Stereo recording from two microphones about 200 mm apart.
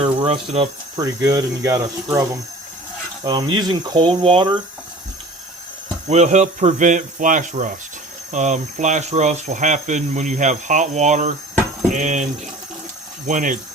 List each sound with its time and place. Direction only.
0.0 s speech: 25° right (ahead or behind)
6.1 s speech: 35° right (ahead or behind)